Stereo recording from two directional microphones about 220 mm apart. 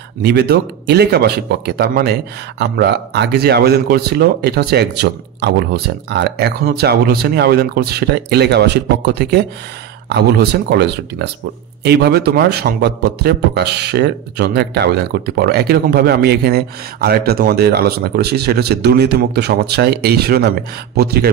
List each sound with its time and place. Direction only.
0.2 s a man's voice: 50° right (ahead or behind)